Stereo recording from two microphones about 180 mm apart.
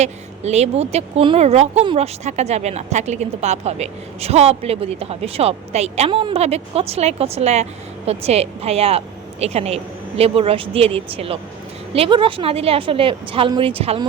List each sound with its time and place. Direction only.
0.0 s speech: 35° right (ahead or behind)